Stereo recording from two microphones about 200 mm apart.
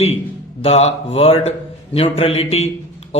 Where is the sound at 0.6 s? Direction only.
30° left (ahead or behind).